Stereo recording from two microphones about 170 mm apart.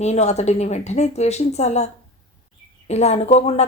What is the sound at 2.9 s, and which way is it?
Speech, 40° left (ahead or behind).